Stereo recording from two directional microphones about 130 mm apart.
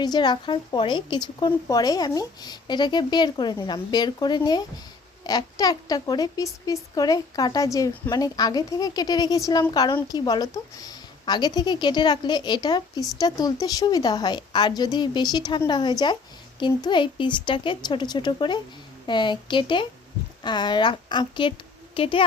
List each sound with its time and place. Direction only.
0.0 s a woman's voice: 35° left (ahead or behind)